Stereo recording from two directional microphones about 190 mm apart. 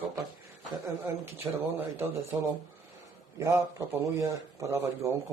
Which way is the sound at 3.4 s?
15° right (ahead or behind).